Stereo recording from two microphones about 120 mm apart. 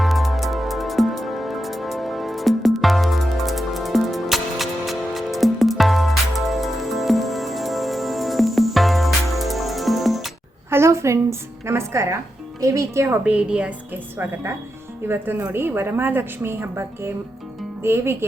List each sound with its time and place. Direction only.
0.0 s music: centre (ahead or behind)
10.7 s music: 20° right (ahead or behind)
12.5 s a woman's voice: 25° right (ahead or behind)
13.2 s a woman's voice: 10° right (ahead or behind)
15.0 s a woman's voice: 20° right (ahead or behind)